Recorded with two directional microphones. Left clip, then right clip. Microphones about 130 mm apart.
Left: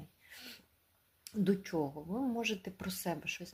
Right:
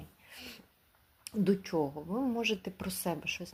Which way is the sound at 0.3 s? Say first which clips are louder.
Right 3 dB; 25° left (ahead or behind).